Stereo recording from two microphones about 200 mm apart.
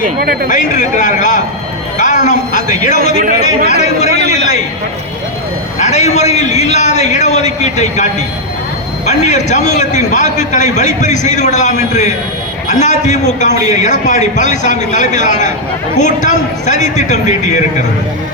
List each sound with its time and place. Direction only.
0.0 s speech: 50° right (ahead or behind)
0.5 s a man's voice: 40° left (ahead or behind)
2.0 s a sound: 35° left (ahead or behind)
3.7 s a man's voice: 35° left (ahead or behind)
4.1 s a sound: 50° right (ahead or behind)
5.8 s a man's voice: 35° left (ahead or behind)
9.0 s a man's voice: 35° left (ahead or behind)